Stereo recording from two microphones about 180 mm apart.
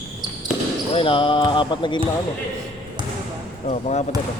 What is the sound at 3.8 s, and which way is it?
Speech, 40° left (ahead or behind).